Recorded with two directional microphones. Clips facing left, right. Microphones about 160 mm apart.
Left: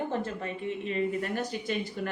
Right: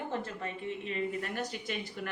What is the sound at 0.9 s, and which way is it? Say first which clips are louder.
Speech: left 6 dB; 35° left (ahead or behind).